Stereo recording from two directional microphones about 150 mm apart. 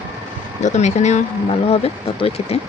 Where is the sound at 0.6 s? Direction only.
50° left (ahead or behind).